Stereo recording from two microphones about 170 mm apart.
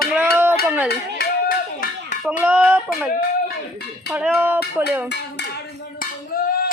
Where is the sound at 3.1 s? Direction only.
60° left (ahead or behind).